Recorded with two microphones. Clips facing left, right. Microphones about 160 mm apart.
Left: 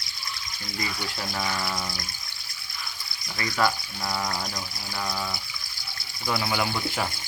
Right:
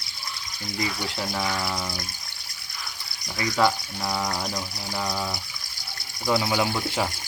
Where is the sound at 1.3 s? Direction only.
10° right (ahead or behind).